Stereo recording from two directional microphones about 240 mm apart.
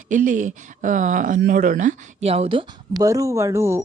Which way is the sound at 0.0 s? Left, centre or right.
Right.